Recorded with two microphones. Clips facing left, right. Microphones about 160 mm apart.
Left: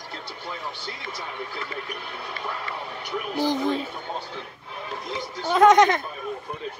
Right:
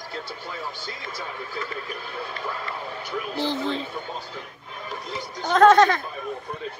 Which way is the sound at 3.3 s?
15° left (ahead or behind).